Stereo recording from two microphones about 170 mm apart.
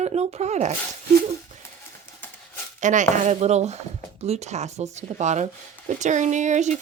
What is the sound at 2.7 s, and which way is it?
Speech, 45° right (ahead or behind).